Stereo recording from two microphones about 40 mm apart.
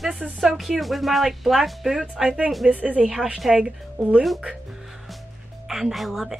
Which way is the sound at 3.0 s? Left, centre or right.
Centre.